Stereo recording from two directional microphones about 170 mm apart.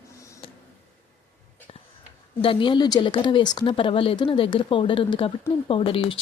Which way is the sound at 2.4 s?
30° left (ahead or behind).